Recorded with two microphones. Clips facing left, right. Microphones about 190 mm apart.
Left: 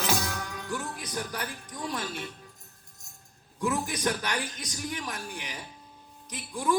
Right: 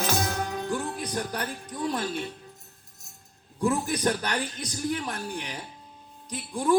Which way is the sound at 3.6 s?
30° right (ahead or behind).